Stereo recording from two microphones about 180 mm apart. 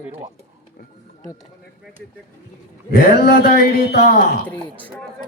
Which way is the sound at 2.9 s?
60° left (ahead or behind).